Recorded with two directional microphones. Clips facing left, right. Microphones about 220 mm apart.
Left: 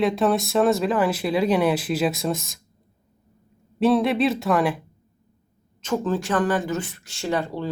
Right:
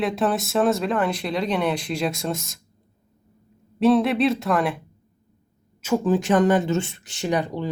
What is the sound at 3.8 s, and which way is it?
Speech, centre (ahead or behind).